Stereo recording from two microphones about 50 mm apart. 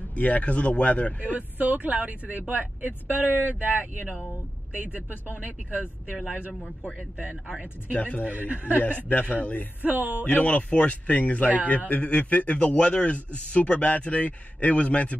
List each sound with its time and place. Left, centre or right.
0.1 s a man's voice: left
1.6 s speech: right
6.1 s speech: centre
7.9 s a man's voice: left
8.3 s speech: right
8.7 s a man's voice: left
9.8 s speech: right
10.3 s a man's voice: left